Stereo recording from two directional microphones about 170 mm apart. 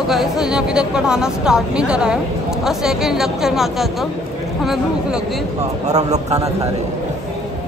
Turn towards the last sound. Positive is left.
turn(degrees=-40)  # may be behind; listen again after turning